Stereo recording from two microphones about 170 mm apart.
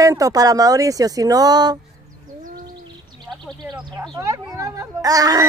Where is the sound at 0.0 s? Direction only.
20° right (ahead or behind).